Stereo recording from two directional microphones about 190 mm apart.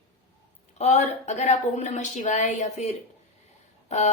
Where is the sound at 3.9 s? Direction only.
35° left (ahead or behind).